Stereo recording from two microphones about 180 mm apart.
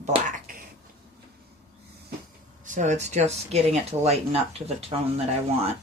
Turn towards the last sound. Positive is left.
turn(degrees=-35)  # may be behind; listen again after turning